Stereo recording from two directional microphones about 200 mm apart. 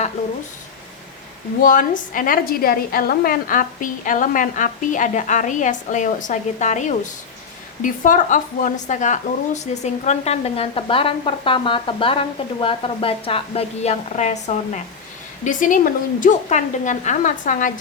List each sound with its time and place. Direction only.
1.6 s speech: 40° left (ahead or behind)